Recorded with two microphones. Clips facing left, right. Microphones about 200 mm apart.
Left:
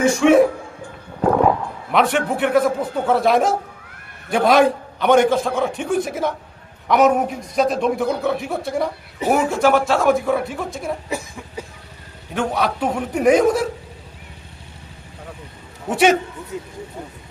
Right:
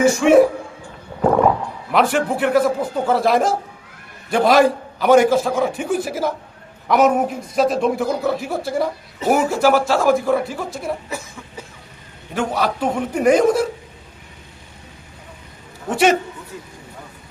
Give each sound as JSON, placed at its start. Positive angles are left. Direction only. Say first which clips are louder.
{"t": 0.0, "sound": "a man's voice", "louder": "right 1 dB", "side_deg": 0}
{"t": 1.9, "sound": "a man's voice", "louder": "right 1 dB", "side_deg": 0}
{"t": 12.3, "sound": "a man's voice", "louder": "even", "side_deg": 0}
{"t": 15.9, "sound": "a man's voice", "louder": "even", "side_deg": 0}
{"t": 16.5, "sound": "vehicle", "louder": "left 9 dB", "side_deg": 20}